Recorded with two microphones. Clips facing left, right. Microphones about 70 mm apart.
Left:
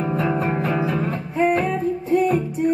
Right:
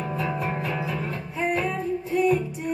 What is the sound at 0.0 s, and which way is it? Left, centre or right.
Music, left.